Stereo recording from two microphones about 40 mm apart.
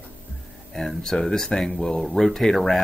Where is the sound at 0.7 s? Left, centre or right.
Centre.